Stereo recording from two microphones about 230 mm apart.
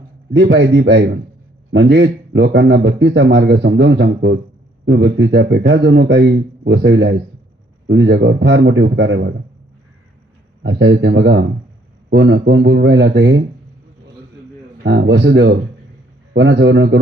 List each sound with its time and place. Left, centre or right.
0.3 s speech: right
10.6 s speech: right
14.8 s speech: right